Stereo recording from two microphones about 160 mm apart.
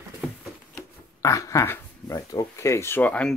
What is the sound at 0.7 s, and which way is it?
Speech, 20° left (ahead or behind).